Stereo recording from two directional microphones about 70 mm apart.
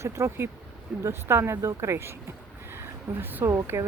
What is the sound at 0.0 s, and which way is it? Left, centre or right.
Speech, right.